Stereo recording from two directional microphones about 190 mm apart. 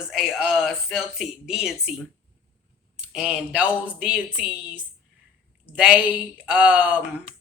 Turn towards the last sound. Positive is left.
turn(degrees=-5)  # may be behind; listen again after turning